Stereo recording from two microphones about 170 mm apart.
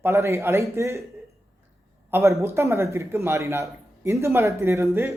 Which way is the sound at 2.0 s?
15° right (ahead or behind).